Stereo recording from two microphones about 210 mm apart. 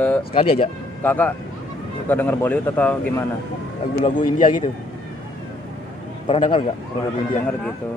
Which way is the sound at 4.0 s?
40° left (ahead or behind).